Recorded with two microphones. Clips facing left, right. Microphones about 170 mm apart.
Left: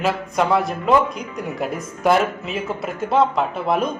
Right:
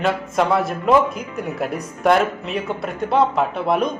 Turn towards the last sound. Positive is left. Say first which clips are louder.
# right 1 dB
turn(degrees=0)  # may be behind; listen again after turning